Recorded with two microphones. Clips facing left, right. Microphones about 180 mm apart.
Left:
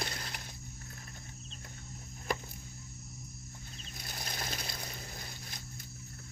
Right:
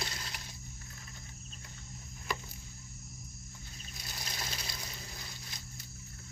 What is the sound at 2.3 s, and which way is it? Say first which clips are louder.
Music: left 3 dB; 50° left (ahead or behind).